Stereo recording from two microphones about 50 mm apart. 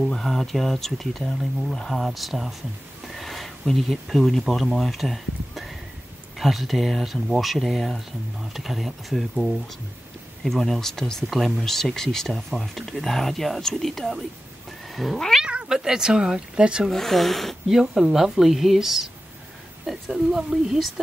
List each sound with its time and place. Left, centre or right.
0.0 s speech: centre
11.2 s speech: centre
15.4 s speech: centre
16.9 s speech: centre
17.6 s speech: centre